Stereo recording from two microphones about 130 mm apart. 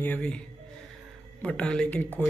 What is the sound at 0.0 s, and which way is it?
Speech, 10° left (ahead or behind).